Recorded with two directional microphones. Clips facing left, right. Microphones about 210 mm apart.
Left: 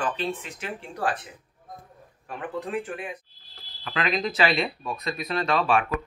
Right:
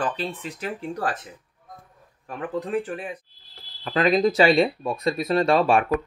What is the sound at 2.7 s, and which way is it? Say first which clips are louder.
Speech: right 4 dB; 35° right (ahead or behind).